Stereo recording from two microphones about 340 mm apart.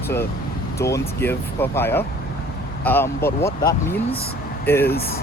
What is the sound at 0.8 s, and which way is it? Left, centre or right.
Speech, centre.